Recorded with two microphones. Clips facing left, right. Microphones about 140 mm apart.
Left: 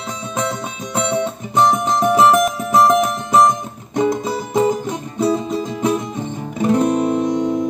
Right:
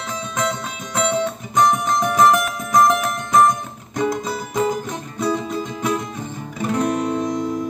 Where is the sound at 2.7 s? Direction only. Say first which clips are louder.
Left 2 dB; 15° left (ahead or behind).